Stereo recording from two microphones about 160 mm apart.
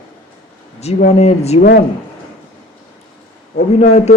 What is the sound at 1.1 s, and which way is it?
Speech, 40° left (ahead or behind).